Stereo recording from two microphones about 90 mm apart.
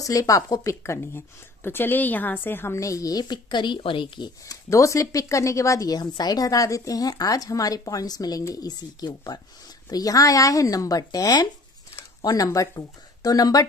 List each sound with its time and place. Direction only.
0.0 s speech: 40° left (ahead or behind)
0.9 s speech: 25° left (ahead or behind); by 4.3 s 65° left (ahead or behind)
4.5 s speech: 35° left (ahead or behind)